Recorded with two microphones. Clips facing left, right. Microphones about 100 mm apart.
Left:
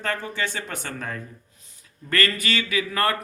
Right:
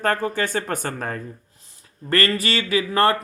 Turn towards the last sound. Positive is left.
turn(degrees=-30)  # may be behind; listen again after turning